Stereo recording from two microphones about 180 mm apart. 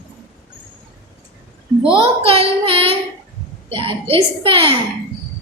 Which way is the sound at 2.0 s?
30° right (ahead or behind).